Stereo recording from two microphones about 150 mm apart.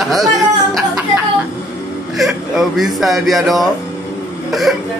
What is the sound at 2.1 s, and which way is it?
Speech, centre (ahead or behind).